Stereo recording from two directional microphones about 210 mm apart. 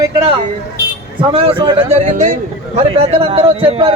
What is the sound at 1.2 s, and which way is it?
A man's voice, 25° right (ahead or behind).